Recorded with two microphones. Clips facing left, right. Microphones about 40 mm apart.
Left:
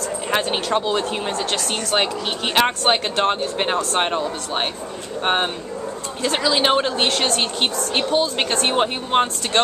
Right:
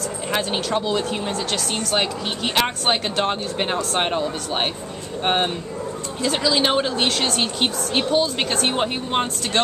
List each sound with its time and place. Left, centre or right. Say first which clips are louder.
0.3 s speech: left 2 dB; centre
6.2 s speech: left 1 dB; centre